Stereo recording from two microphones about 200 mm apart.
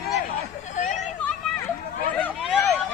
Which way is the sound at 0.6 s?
40° left (ahead or behind).